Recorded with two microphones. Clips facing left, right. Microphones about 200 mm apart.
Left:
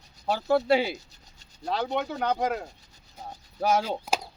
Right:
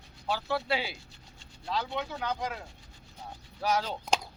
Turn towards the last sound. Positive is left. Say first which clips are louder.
# left 3 dB
turn(degrees=5)  # may be behind; listen again after turning